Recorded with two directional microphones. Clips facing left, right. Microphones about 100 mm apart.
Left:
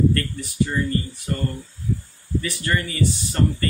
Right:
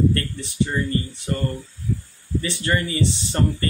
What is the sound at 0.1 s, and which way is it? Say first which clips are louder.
Speech: left 1 dB; 25° right (ahead or behind).